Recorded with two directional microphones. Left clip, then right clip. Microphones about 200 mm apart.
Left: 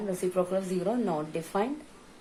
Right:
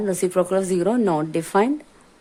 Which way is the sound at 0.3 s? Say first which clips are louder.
Right 9 dB; 50° right (ahead or behind).